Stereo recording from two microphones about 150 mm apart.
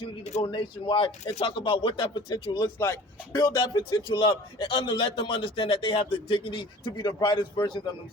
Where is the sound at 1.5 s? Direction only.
35° left (ahead or behind).